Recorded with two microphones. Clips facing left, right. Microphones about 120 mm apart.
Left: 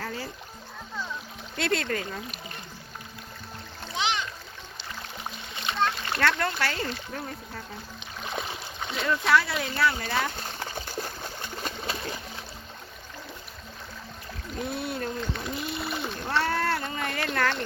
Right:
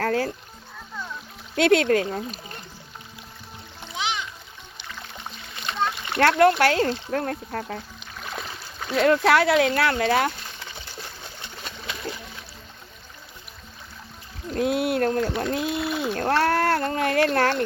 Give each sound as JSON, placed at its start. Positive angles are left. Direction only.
{"t": 0.0, "sound": "music", "side_deg": -70}
{"t": 1.5, "sound": "speech", "side_deg": -65}
{"t": 2.0, "sound": "speech", "side_deg": -35}
{"t": 3.9, "sound": "splash", "side_deg": -5}
{"t": 5.7, "sound": "splash", "side_deg": 5}
{"t": 6.1, "sound": "speech", "side_deg": -60}
{"t": 8.2, "sound": "splash", "side_deg": 0}
{"t": 9.0, "sound": "speech", "side_deg": -65}
{"t": 10.4, "sound": "water", "side_deg": 40}
{"t": 14.5, "sound": "speech", "side_deg": -90}
{"t": 15.4, "sound": "speech", "side_deg": -90}
{"t": 15.9, "sound": "a sound", "side_deg": -5}
{"t": 16.3, "sound": "a sound", "side_deg": -55}